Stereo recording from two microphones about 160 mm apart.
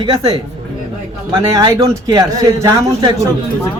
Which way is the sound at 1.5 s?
25° right (ahead or behind).